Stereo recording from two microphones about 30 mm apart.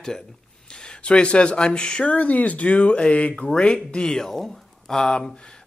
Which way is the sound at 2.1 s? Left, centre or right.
Left.